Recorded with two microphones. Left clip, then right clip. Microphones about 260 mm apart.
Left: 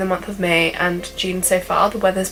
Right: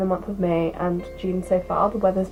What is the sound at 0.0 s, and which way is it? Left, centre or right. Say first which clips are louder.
Speech: left 3 dB; centre.